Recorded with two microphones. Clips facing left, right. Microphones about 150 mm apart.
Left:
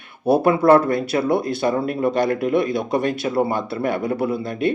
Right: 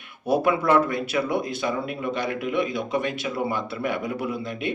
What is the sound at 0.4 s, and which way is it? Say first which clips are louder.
Speech: left 7 dB; 40° left (ahead or behind).